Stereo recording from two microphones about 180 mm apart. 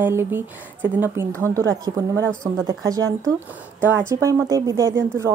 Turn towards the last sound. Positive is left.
turn(degrees=-15)  # may be behind; listen again after turning